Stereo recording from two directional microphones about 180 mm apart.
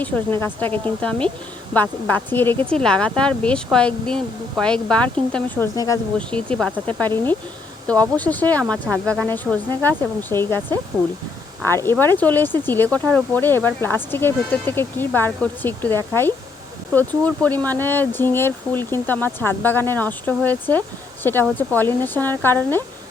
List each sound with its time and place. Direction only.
0.0 s speech: 10° left (ahead or behind)
5.7 s speech: 20° left (ahead or behind)
6.1 s speech: 5° left (ahead or behind)